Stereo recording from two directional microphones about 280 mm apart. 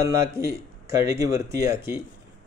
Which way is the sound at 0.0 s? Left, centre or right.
Centre.